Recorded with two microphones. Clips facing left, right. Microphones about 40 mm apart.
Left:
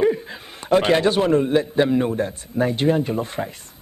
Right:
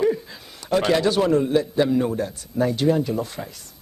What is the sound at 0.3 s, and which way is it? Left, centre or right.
Speech, left.